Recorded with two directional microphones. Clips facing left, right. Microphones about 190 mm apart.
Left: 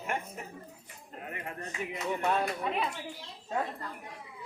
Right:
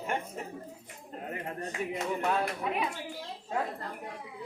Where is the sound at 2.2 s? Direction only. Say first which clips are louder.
Left 2 dB; 5° right (ahead or behind).